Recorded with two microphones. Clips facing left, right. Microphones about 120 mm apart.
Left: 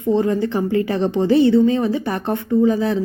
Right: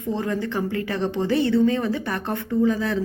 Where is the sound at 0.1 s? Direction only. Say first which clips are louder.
Left 8 dB; 25° left (ahead or behind).